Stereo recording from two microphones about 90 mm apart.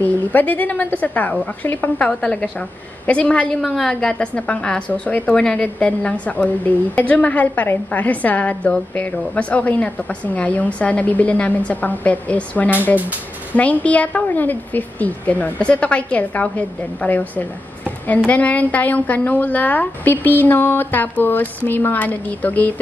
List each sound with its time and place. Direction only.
0.0 s a woman's voice: 20° left (ahead or behind)